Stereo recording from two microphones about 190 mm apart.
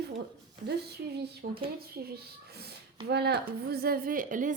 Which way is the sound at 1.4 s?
60° right (ahead or behind).